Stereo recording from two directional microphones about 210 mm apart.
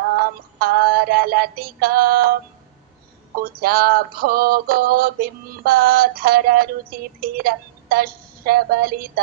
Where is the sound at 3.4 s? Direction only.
45° right (ahead or behind).